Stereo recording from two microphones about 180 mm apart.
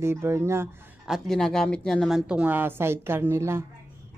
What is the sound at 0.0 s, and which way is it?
Speech, 15° right (ahead or behind).